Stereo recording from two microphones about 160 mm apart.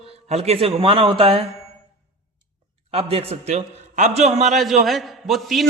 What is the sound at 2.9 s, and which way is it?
A man's voice, 40° right (ahead or behind).